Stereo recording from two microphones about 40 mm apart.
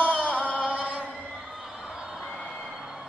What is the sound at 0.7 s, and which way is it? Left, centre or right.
Chant, right.